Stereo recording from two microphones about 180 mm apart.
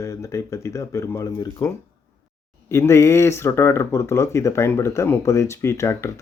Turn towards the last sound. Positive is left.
turn(degrees=15)  # may be behind; listen again after turning